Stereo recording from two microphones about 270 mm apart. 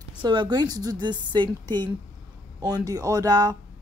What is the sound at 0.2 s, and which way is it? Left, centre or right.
Speech, centre.